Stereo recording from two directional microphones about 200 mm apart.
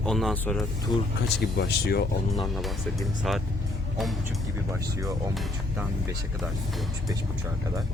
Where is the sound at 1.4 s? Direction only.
55° left (ahead or behind).